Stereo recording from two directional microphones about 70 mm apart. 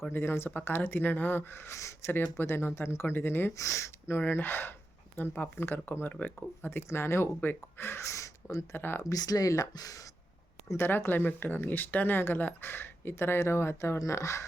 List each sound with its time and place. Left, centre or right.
0.1 s speech: left
3.6 s speech: left
4.2 s speech: left
6.7 s speech: left
8.7 s speech: left
9.0 s speech: left
10.7 s speech: left